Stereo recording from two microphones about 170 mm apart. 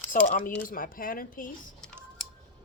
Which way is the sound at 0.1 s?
50° left (ahead or behind).